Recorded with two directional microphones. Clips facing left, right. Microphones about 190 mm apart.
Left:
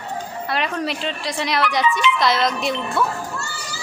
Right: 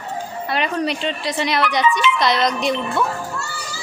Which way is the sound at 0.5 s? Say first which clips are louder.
Right 3 dB; centre (ahead or behind).